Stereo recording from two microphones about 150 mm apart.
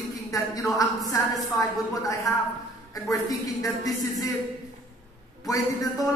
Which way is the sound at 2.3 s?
20° left (ahead or behind).